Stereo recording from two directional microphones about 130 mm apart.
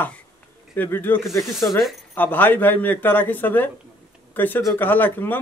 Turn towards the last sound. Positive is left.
turn(degrees=15)  # may be behind; listen again after turning